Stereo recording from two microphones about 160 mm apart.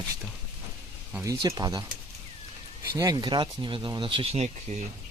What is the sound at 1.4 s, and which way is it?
Speech, 25° right (ahead or behind).